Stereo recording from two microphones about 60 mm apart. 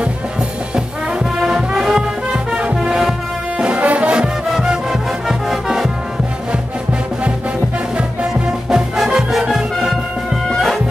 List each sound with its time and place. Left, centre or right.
0.7 s music: centre
4.5 s music: centre
6.5 s music: centre
10.5 s music: centre